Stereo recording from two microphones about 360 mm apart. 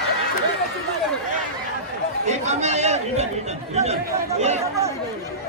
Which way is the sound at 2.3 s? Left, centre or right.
Centre.